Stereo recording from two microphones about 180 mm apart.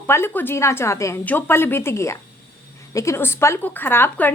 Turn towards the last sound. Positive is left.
turn(degrees=10)  # may be behind; listen again after turning